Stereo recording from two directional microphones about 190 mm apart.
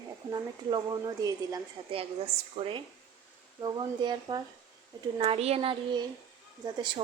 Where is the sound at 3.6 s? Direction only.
20° right (ahead or behind).